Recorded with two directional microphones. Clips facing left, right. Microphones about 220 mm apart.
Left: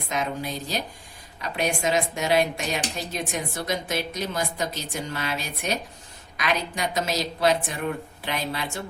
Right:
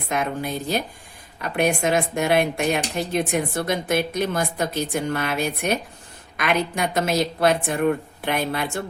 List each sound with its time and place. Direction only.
0.1 s a woman's voice: 55° right (ahead or behind)